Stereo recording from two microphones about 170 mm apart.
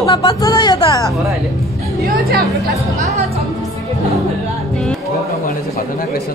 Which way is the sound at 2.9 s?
40° right (ahead or behind).